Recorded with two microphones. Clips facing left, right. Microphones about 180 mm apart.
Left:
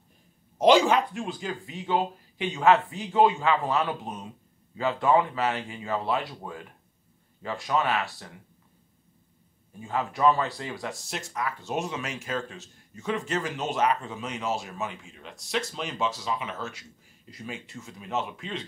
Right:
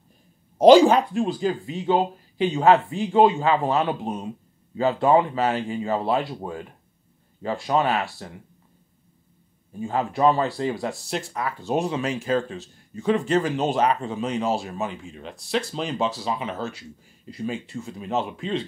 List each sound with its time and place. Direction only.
0.6 s speech: 35° right (ahead or behind)
9.8 s speech: 30° right (ahead or behind)